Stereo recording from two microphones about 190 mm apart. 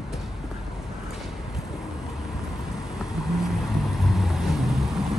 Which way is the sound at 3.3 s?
Centre (ahead or behind).